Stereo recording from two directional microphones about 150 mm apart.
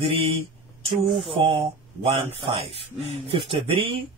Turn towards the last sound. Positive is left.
turn(degrees=-35)  # may be behind; listen again after turning